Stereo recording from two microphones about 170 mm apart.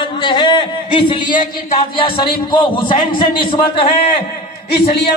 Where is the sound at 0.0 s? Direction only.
30° left (ahead or behind).